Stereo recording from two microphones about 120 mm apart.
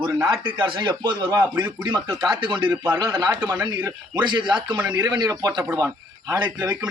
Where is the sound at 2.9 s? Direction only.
25° right (ahead or behind).